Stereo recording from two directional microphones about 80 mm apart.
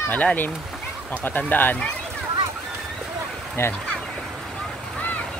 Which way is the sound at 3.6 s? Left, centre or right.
Left.